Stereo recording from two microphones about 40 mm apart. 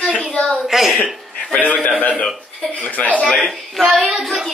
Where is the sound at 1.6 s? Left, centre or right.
Left.